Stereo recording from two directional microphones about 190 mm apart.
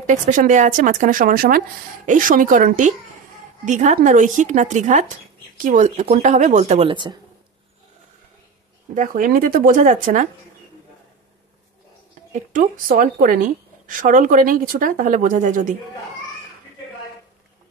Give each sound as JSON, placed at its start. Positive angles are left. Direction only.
{"t": 0.0, "sound": "a woman's voice", "side_deg": -40}
{"t": 8.9, "sound": "a woman's voice", "side_deg": -45}
{"t": 12.3, "sound": "a woman's voice", "side_deg": -45}